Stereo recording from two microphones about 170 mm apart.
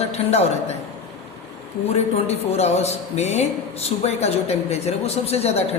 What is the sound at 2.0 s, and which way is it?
A man's voice, 40° left (ahead or behind).